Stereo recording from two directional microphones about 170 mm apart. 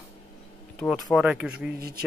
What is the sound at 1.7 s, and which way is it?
Speech, 65° right (ahead or behind).